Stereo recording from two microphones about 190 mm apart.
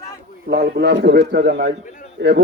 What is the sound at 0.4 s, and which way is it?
A man's voice, 60° right (ahead or behind).